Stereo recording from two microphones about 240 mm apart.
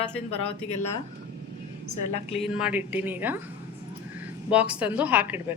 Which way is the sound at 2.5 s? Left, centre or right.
Centre.